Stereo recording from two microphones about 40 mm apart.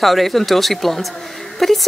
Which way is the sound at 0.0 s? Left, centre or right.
Centre.